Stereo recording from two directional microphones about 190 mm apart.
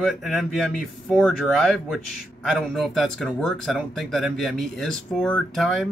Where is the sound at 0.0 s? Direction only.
Centre (ahead or behind).